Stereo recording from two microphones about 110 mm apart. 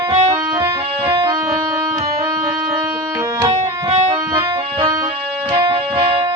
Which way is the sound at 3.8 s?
70° right (ahead or behind).